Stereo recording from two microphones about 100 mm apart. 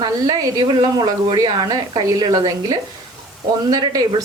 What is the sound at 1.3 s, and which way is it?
Speech, 40° right (ahead or behind).